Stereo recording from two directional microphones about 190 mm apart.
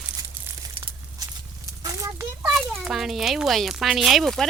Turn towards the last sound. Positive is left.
turn(degrees=0)  # may be behind; listen again after turning